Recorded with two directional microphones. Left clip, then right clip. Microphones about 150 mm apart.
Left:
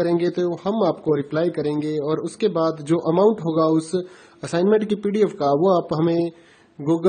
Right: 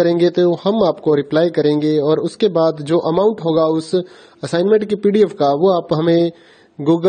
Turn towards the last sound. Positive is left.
turn(degrees=-45)  # may be behind; listen again after turning